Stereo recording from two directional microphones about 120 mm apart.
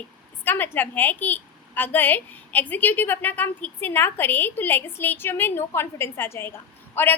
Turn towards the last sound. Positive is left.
turn(degrees=15)  # may be behind; listen again after turning